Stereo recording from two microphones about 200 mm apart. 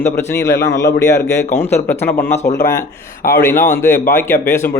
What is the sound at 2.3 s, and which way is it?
A man's voice, 35° left (ahead or behind).